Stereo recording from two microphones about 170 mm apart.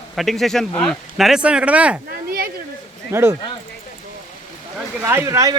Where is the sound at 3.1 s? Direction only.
15° right (ahead or behind).